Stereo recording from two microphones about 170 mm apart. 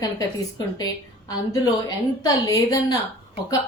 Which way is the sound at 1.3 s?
20° left (ahead or behind).